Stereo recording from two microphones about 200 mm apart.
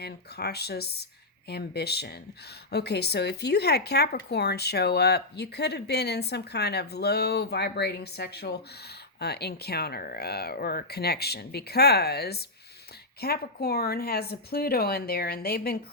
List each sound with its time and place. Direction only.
0.0 s speech: 55° left (ahead or behind)